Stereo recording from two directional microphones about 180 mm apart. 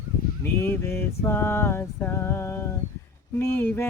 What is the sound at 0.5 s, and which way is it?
Music, 10° left (ahead or behind).